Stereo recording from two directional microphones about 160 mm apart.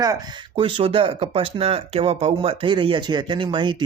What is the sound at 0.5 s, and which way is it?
Speech, 35° right (ahead or behind).